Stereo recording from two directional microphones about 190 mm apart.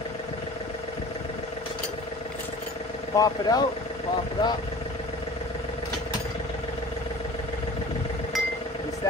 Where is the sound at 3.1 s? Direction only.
20° left (ahead or behind).